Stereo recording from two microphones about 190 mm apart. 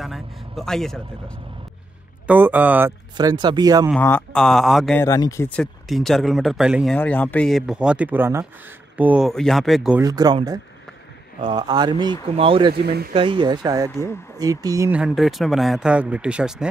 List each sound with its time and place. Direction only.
0.0 s vehicle: centre (ahead or behind)
2.2 s speech: 10° right (ahead or behind)
3.2 s speech: 20° right (ahead or behind)
4.0 s speech: 5° left (ahead or behind)
5.0 s speech: 15° left (ahead or behind); by 9.9 s centre (ahead or behind)
10.0 s speech: 20° right (ahead or behind)
12.7 s speech: 55° right (ahead or behind)
13.1 s speech: 25° right (ahead or behind)
15.0 s speech: centre (ahead or behind)